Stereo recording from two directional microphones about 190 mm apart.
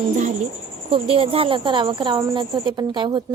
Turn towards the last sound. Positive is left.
turn(degrees=-25)  # may be behind; listen again after turning